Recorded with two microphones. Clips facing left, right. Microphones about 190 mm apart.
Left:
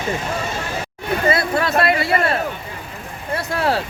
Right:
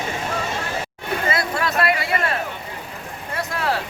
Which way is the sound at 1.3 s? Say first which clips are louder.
Left 3 dB; 30° left (ahead or behind).